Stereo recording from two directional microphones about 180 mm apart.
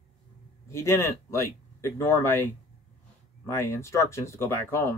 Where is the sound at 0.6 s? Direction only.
15° left (ahead or behind).